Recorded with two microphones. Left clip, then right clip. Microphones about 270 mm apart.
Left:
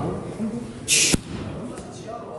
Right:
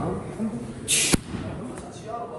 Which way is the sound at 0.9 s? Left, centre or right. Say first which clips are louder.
Left 4 dB; centre.